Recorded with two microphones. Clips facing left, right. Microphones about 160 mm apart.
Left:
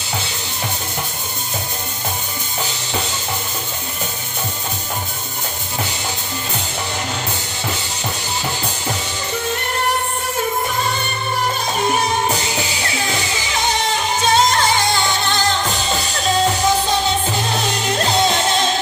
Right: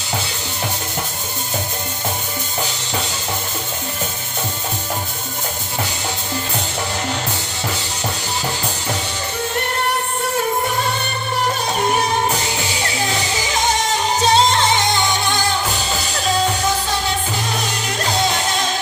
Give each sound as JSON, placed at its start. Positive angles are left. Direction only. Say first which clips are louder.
{"t": 14.2, "sound": "music", "louder": "right 1 dB", "side_deg": -25}